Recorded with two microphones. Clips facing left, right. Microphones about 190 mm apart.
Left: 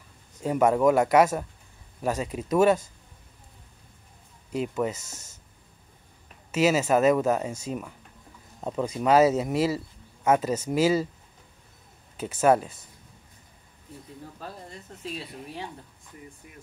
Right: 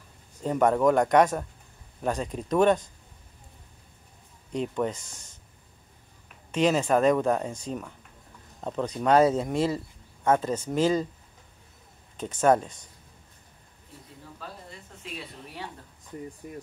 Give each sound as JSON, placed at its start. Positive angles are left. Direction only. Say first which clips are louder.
{"t": 0.4, "sound": "speech", "louder": "left 1 dB", "side_deg": 10}
{"t": 4.5, "sound": "speech", "louder": "left 1 dB", "side_deg": 5}
{"t": 6.5, "sound": "speech", "louder": "left 1 dB", "side_deg": 5}
{"t": 12.2, "sound": "speech", "louder": "left 1 dB", "side_deg": 5}
{"t": 16.4, "sound": "speech", "louder": "right 10 dB", "side_deg": -40}